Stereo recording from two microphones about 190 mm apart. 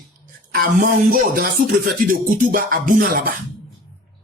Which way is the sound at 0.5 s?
50° right (ahead or behind).